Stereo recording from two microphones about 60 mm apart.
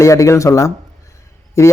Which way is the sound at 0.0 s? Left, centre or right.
Left.